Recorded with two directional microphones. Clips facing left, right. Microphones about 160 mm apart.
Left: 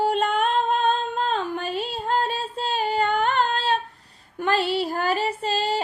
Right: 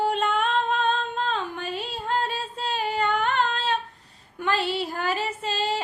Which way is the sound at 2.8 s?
35° left (ahead or behind).